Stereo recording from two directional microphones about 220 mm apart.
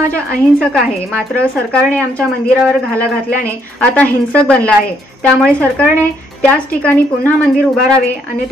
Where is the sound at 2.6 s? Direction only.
Centre (ahead or behind).